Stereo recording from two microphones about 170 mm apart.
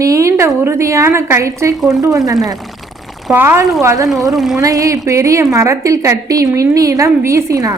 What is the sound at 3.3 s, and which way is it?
Speech, 15° right (ahead or behind).